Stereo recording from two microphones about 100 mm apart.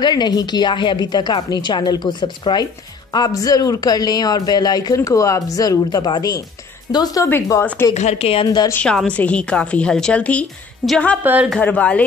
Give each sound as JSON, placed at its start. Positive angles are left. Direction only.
{"t": 0.0, "sound": "a woman's voice", "side_deg": 45}
{"t": 7.9, "sound": "a woman's voice", "side_deg": 90}
{"t": 8.8, "sound": "a woman's voice", "side_deg": 10}
{"t": 10.8, "sound": "a woman's voice", "side_deg": -10}
{"t": 11.6, "sound": "a woman's voice", "side_deg": 10}